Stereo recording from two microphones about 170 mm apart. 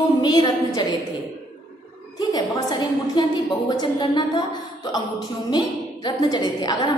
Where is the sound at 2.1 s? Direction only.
25° left (ahead or behind).